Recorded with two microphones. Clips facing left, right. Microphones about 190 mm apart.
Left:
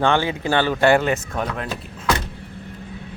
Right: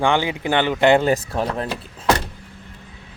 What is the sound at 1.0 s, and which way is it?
Speech, 35° right (ahead or behind).